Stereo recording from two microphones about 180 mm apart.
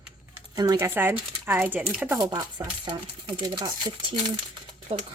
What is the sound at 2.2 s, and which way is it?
Speech, 20° right (ahead or behind).